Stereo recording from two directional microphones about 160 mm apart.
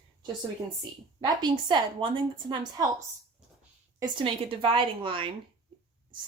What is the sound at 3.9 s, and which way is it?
Speech, 30° right (ahead or behind).